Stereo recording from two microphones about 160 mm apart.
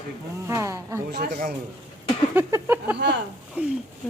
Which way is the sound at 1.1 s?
90° right.